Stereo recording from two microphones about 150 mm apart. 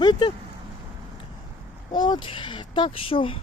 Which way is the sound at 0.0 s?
30° left (ahead or behind).